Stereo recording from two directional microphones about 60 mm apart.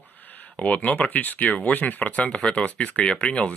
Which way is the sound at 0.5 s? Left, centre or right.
Left.